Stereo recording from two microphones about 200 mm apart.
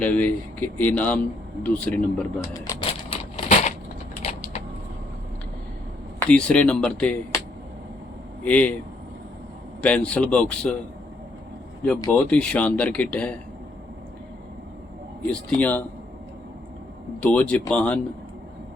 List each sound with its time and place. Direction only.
0.0 s speech: 10° left (ahead or behind)
3.1 s a sound: 25° left (ahead or behind)
4.2 s mechanisms: 30° left (ahead or behind)
6.1 s speech: 5° left (ahead or behind)
8.4 s speech: 5° left (ahead or behind)
9.8 s speech: 5° left (ahead or behind)
12.1 s speech: 5° left (ahead or behind)
15.3 s speech: 5° left (ahead or behind)
17.2 s speech: 5° left (ahead or behind)